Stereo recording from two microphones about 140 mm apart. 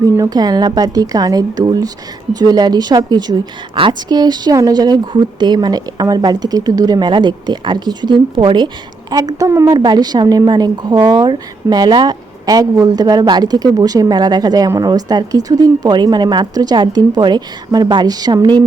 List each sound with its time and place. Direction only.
0.0 s a woman's voice: 25° right (ahead or behind)